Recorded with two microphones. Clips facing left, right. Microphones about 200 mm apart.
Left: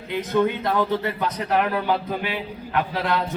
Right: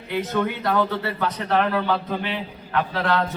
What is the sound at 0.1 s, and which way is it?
A man's voice, 20° left (ahead or behind).